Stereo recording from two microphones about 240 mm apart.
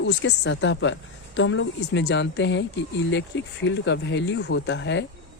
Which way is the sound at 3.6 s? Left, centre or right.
Left.